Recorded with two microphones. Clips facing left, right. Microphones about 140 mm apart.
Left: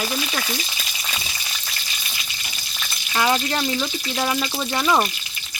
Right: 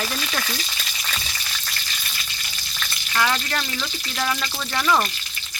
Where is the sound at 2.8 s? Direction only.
20° left (ahead or behind).